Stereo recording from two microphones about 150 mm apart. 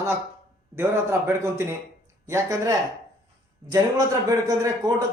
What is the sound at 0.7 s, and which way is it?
A man's voice, 15° right (ahead or behind).